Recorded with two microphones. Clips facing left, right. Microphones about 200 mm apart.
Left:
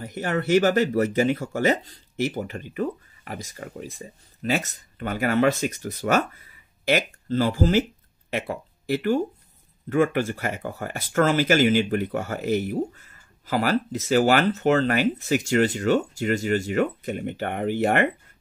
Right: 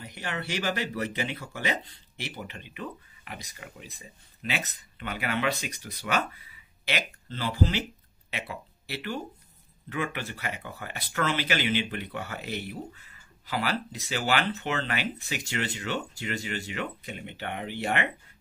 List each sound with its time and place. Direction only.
0.0 s speech: 45° left (ahead or behind)